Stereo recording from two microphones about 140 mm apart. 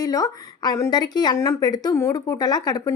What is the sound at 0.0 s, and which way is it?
Speech, 25° left (ahead or behind).